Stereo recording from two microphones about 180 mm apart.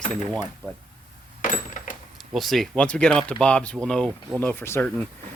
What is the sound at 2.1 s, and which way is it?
Speech, centre (ahead or behind).